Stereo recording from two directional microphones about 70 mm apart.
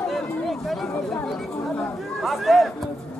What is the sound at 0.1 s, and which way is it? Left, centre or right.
Chatter, centre.